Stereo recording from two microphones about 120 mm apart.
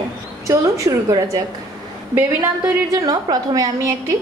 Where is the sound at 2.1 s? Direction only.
20° right (ahead or behind).